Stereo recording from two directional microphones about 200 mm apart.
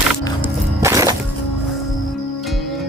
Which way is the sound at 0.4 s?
15° right (ahead or behind).